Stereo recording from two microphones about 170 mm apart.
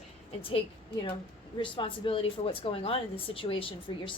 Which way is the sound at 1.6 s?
30° left (ahead or behind).